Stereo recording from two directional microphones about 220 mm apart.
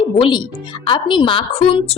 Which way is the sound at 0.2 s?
20° left (ahead or behind).